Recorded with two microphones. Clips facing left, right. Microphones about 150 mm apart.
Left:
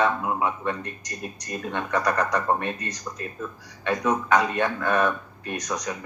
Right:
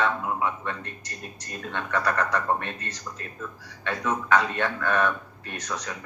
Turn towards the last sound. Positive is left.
turn(degrees=15)  # may be behind; listen again after turning